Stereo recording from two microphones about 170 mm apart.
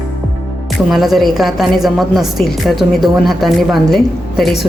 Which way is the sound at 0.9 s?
Centre (ahead or behind).